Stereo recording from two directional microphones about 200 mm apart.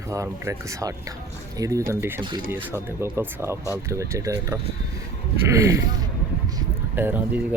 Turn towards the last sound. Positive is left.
turn(degrees=-10)  # may be behind; listen again after turning